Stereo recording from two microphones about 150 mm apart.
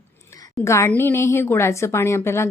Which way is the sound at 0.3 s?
25° left (ahead or behind).